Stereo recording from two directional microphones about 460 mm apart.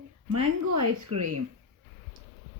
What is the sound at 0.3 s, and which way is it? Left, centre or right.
Speech, right.